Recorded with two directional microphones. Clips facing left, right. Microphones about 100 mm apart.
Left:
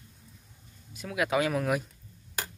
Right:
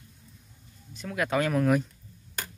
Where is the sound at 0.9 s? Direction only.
5° left (ahead or behind).